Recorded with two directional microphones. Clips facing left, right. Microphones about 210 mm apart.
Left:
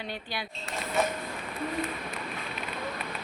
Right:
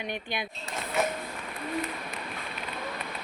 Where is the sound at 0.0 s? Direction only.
20° right (ahead or behind).